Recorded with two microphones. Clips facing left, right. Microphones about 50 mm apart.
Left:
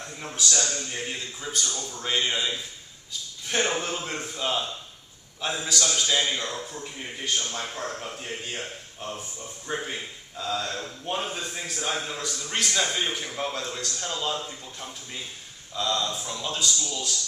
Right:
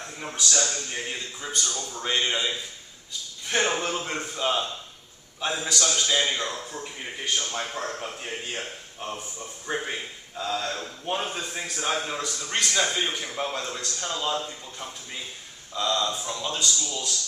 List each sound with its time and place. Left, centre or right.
0.0 s a man's voice: centre
9.6 s a man's voice: centre
10.6 s a man's voice: centre